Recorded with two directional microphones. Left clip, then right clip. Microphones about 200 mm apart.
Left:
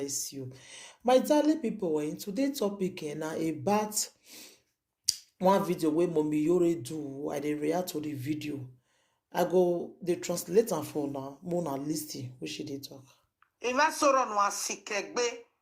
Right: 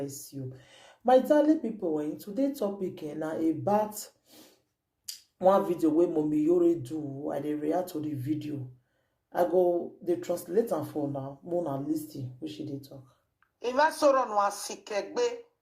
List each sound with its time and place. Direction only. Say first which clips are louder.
0.0 s speech: left 2 dB; 20° left (ahead or behind)
5.4 s speech: right 3 dB; 20° left (ahead or behind)
13.7 s speech: right 2 dB; 10° left (ahead or behind)